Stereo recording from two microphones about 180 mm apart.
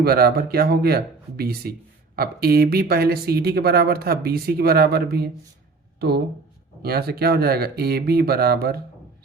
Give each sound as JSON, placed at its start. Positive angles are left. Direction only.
{"t": 0.0, "sound": "speech", "side_deg": -60}